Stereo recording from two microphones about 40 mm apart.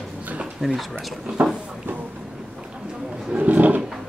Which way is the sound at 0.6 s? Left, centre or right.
Centre.